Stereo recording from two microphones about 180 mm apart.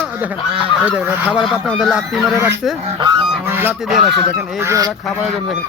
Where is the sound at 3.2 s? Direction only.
10° right (ahead or behind).